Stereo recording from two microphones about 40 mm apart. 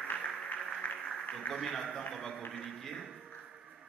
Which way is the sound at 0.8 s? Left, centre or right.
Left.